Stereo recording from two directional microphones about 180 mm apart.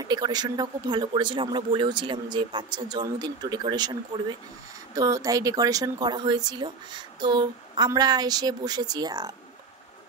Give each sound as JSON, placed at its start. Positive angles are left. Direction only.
{"t": 0.0, "sound": "speech", "side_deg": -20}